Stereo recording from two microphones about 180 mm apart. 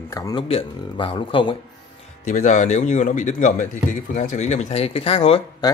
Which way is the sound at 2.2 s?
45° left (ahead or behind).